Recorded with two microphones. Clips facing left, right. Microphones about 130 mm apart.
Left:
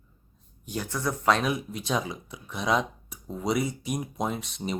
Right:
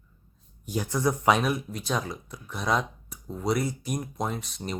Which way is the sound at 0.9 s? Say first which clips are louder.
Right 2 dB; 15° right (ahead or behind).